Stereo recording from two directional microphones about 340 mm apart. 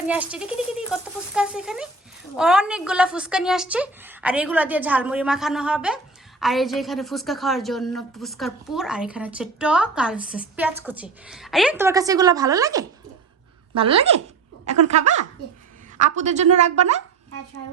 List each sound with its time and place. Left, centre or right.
0.1 s a woman's voice: centre
16.0 s a woman's voice: centre